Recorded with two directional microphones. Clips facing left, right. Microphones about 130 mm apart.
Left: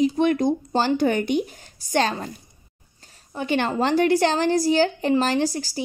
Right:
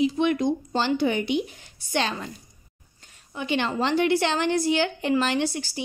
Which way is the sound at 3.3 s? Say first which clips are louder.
Left 3 dB; 45° left (ahead or behind).